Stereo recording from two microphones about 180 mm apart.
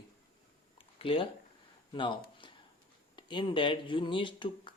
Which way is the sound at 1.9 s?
25° left (ahead or behind).